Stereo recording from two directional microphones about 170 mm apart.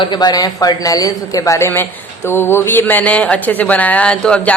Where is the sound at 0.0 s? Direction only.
25° left (ahead or behind).